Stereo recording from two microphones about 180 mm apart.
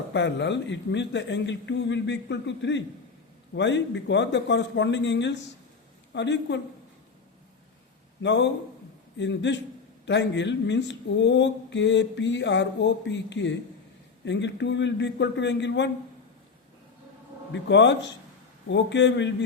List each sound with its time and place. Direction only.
0.1 s speech: 80° left
8.2 s speech: 80° left
17.5 s speech: 85° left